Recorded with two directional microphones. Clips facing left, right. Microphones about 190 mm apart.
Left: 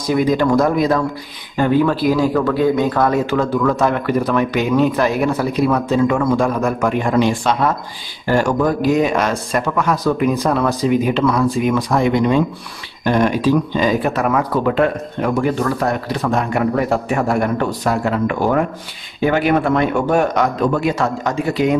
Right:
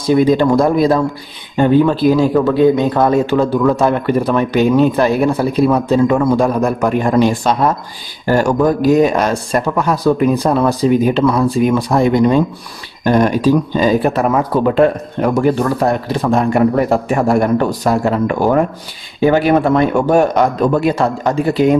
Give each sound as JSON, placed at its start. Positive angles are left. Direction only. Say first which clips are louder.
{"t": 0.0, "sound": "speech", "louder": "right 4 dB", "side_deg": -30}